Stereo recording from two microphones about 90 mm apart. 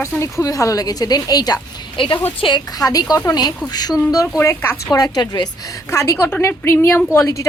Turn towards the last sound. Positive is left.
turn(degrees=25)  # may be behind; listen again after turning